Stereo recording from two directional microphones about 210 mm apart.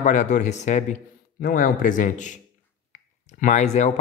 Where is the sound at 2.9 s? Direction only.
35° left (ahead or behind).